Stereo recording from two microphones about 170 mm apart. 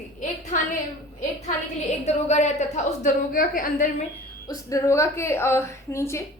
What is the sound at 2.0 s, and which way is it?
Speech, 40° left (ahead or behind).